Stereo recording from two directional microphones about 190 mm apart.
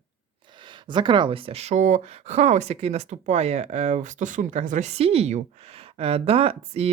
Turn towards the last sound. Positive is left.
turn(degrees=-30)  # may be behind; listen again after turning